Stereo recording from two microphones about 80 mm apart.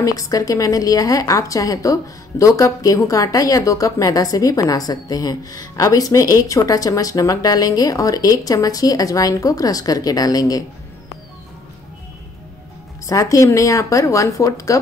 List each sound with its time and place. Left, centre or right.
0.0 s a woman's voice: left
13.0 s a woman's voice: left